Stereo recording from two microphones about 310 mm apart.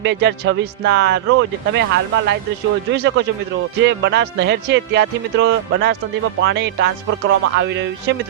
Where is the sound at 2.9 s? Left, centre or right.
Right.